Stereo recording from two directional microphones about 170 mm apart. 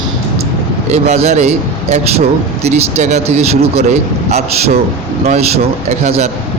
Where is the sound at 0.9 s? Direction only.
40° right (ahead or behind).